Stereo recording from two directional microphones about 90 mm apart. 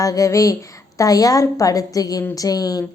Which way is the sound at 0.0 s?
40° left (ahead or behind).